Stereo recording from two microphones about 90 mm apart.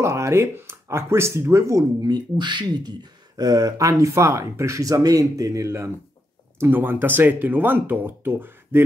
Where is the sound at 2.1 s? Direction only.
55° right (ahead or behind).